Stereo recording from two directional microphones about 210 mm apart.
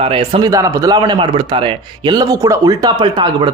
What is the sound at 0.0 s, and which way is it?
A man's voice, 25° right (ahead or behind).